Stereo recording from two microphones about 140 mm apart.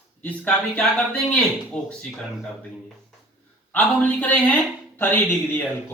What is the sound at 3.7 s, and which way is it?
Speech, 10° left (ahead or behind).